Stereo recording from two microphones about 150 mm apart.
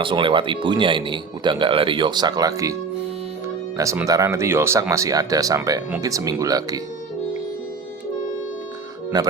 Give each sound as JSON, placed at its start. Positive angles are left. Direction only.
{"t": 0.0, "sound": "speech", "side_deg": -35}
{"t": 4.0, "sound": "speech", "side_deg": -20}
{"t": 9.1, "sound": "speech", "side_deg": -25}